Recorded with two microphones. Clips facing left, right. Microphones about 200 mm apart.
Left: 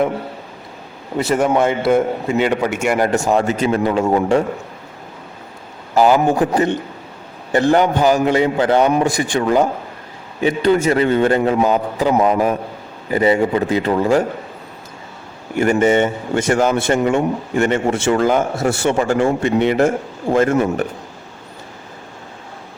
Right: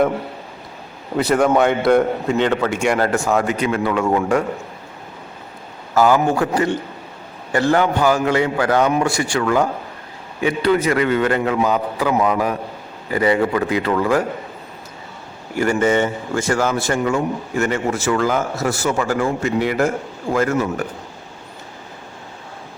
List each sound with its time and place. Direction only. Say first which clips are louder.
1.1 s a man's voice: even; centre (ahead or behind)
3.2 s a man's voice: left 2 dB; 25° left (ahead or behind)
5.9 s a man's voice: left 2 dB; 20° left (ahead or behind)
10.8 s a man's voice: left 3 dB; 25° left (ahead or behind)
15.5 s a man's voice: left 3 dB; 25° left (ahead or behind)